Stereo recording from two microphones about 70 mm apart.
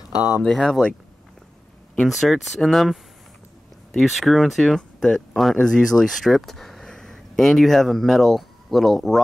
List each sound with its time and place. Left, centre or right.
0.1 s speech: left
0.4 s speech: centre
2.0 s speech: centre
4.0 s speech: centre